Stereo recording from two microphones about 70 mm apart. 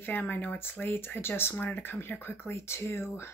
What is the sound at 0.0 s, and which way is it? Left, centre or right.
Speech, left.